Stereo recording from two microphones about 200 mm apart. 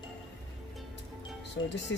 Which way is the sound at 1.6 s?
65° left (ahead or behind).